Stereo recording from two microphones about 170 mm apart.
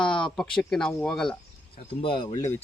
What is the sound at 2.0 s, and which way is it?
Speech, 30° left (ahead or behind).